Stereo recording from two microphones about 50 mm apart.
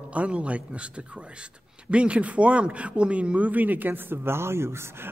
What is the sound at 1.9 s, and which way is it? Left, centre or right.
Speech, right.